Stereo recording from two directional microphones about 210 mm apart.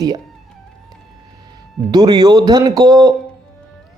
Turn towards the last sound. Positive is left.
turn(degrees=-20)  # may be behind; listen again after turning